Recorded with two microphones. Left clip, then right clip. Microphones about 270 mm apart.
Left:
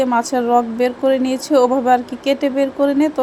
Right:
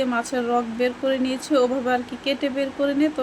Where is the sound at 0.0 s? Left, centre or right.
Centre.